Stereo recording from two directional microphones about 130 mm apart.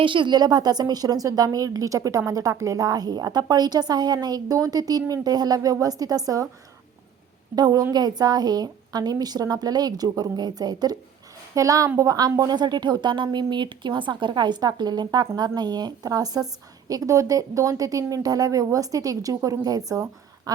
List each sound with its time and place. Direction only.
0.0 s a woman's voice: 40° right (ahead or behind)
7.5 s a woman's voice: 30° right (ahead or behind)